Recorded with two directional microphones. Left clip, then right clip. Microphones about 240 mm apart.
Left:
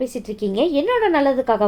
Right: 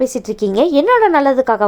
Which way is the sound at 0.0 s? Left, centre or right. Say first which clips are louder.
Right 7 dB; right.